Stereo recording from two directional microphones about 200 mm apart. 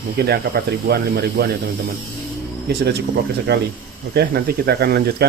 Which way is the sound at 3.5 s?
55° right (ahead or behind).